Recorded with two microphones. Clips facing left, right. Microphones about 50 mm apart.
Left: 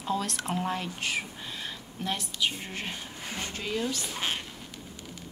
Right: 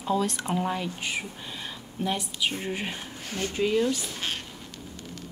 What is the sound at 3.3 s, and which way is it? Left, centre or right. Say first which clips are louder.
Speech: right 5 dB; left.